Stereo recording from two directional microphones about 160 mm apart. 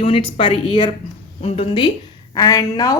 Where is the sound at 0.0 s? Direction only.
35° left (ahead or behind).